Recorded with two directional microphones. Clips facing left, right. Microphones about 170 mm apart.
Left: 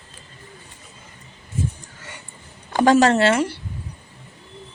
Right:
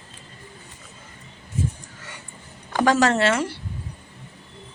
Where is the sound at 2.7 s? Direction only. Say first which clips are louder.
Left 4 dB; 30° left (ahead or behind).